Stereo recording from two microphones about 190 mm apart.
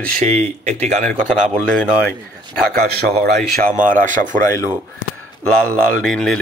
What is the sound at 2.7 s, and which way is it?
A man's voice, 50° right (ahead or behind).